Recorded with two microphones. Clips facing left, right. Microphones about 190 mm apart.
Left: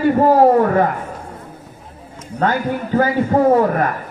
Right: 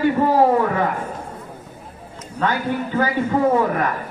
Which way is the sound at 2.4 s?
45° left (ahead or behind).